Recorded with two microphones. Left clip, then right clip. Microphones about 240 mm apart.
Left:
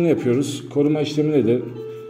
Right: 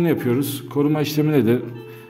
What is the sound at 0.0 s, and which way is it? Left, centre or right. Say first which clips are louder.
A man's voice: left 2 dB; centre.